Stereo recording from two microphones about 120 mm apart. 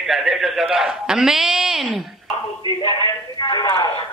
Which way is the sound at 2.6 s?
40° left (ahead or behind).